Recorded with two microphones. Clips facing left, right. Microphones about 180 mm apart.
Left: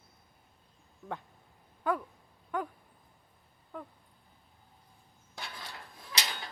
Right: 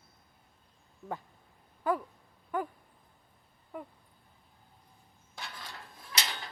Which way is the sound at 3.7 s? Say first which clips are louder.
Right 1 dB; 10° right (ahead or behind).